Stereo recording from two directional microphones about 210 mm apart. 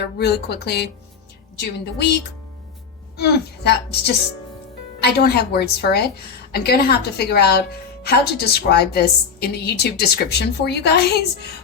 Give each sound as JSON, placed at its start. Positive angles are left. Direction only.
{"t": 0.0, "sound": "a woman's voice", "side_deg": 50}
{"t": 3.2, "sound": "a woman's voice", "side_deg": 50}